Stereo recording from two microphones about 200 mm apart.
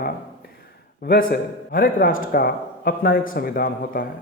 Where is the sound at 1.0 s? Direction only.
50° left (ahead or behind).